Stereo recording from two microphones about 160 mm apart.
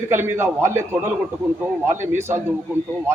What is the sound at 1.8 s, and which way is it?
Speech, 15° right (ahead or behind).